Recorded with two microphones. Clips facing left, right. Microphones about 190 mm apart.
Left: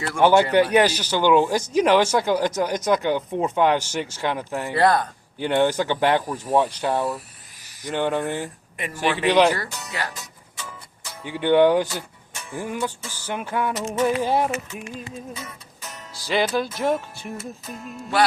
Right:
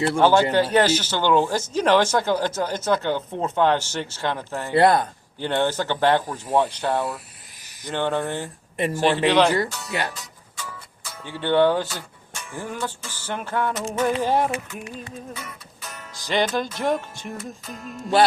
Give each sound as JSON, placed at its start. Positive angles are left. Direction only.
{"t": 0.2, "sound": "speech", "side_deg": 15}
{"t": 4.7, "sound": "speech", "side_deg": -25}
{"t": 5.4, "sound": "speech", "side_deg": 10}
{"t": 9.6, "sound": "speech", "side_deg": -25}
{"t": 11.0, "sound": "speech", "side_deg": 15}
{"t": 16.1, "sound": "music", "side_deg": 5}